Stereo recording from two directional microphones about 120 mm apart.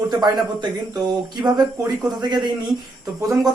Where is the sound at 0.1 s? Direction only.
35° right (ahead or behind).